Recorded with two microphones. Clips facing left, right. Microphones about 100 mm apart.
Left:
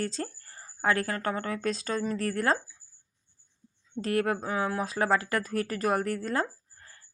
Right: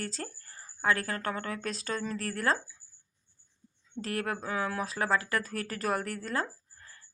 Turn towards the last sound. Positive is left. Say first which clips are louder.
# left 4 dB
turn(degrees=35)  # may be behind; listen again after turning